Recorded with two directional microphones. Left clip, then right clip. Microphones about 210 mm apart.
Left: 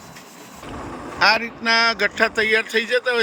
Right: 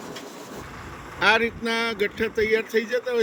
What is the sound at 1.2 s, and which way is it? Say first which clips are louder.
Speech: left 3 dB; 5° right (ahead or behind).